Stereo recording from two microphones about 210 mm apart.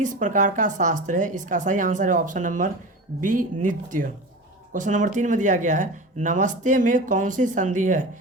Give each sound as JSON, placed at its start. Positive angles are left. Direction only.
{"t": 0.0, "sound": "speech", "side_deg": -35}